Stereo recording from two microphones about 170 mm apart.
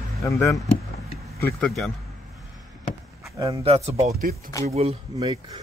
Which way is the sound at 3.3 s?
20° right (ahead or behind).